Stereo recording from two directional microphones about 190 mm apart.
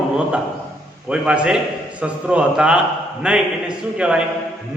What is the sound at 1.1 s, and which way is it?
A man's voice, 5° right (ahead or behind).